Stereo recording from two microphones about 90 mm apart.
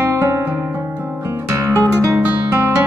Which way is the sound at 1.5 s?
30° right (ahead or behind).